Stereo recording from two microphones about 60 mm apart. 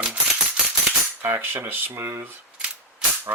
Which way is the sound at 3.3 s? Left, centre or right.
Right.